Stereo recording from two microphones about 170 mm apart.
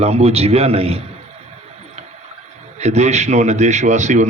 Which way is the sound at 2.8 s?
40° right (ahead or behind).